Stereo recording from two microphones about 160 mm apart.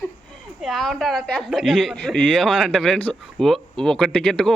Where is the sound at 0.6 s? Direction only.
Centre (ahead or behind).